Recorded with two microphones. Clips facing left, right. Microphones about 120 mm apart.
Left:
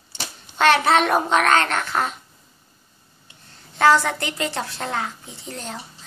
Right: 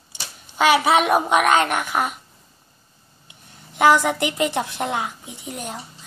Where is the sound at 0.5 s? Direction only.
10° right (ahead or behind).